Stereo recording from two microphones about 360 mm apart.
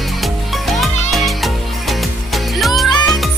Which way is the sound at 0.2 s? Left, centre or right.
Centre.